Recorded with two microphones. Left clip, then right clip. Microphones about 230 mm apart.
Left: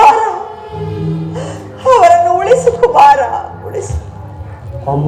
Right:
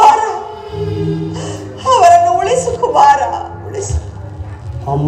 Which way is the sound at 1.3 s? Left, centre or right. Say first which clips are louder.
Left 1 dB; right.